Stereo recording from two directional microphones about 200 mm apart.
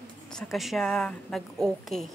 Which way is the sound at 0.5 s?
Centre (ahead or behind).